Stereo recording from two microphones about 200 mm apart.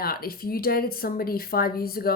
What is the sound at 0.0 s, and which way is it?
Speech, 50° left (ahead or behind).